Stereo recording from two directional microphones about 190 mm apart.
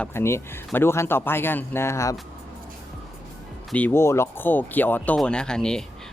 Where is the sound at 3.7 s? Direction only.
10° left (ahead or behind).